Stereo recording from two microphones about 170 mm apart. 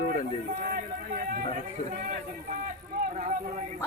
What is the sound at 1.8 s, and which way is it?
Speech, 50° right (ahead or behind).